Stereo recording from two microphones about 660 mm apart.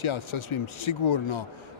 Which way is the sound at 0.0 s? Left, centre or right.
Left.